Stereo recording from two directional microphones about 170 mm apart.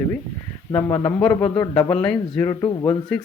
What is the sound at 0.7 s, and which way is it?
A man's voice, 15° left (ahead or behind).